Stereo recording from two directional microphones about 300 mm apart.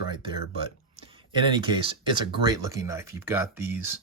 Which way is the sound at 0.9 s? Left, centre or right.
Centre.